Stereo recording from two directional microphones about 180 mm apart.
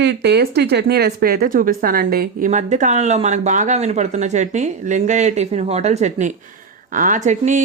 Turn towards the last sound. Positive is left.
turn(degrees=-45)  # may be behind; listen again after turning